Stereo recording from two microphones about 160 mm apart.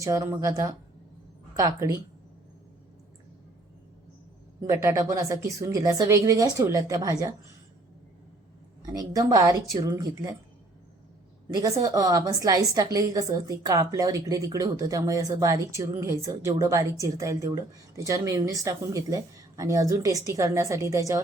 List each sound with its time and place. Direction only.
0.0 s a woman's voice: 20° right (ahead or behind)
4.6 s a woman's voice: 20° right (ahead or behind)
8.9 s a woman's voice: 20° right (ahead or behind)
11.5 s a woman's voice: 25° right (ahead or behind)